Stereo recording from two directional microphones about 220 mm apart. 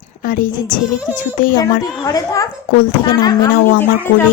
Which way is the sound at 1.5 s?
15° left (ahead or behind).